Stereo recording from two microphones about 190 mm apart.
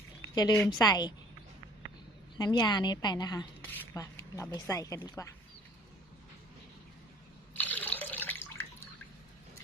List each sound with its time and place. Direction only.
0.3 s a woman's voice: 20° left (ahead or behind)
2.4 s a woman's voice: 20° left (ahead or behind)
7.5 s water: 10° left (ahead or behind)